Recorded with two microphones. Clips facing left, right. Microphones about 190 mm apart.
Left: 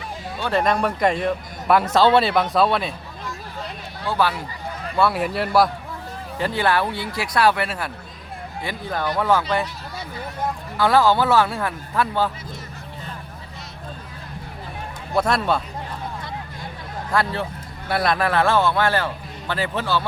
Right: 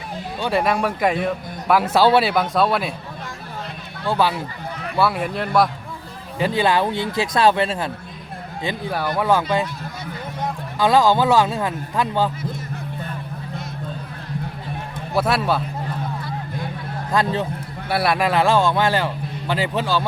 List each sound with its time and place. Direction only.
0.3 s speech: 15° right (ahead or behind)
4.9 s speech: centre (ahead or behind)
6.4 s speech: 15° right (ahead or behind)
8.9 s a man's voice: 10° right (ahead or behind)
10.8 s a man's voice: 15° right (ahead or behind)
15.1 s speech: 5° right (ahead or behind)
17.1 s a man's voice: 20° right (ahead or behind)